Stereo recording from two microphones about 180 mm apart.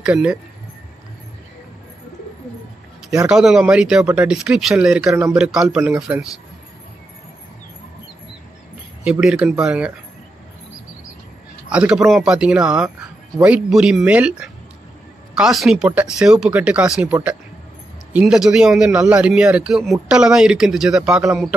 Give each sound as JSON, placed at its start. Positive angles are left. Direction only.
{"t": 0.0, "sound": "speech", "side_deg": -5}
{"t": 3.3, "sound": "speech", "side_deg": -5}
{"t": 9.0, "sound": "speech", "side_deg": -5}
{"t": 11.7, "sound": "speech", "side_deg": -5}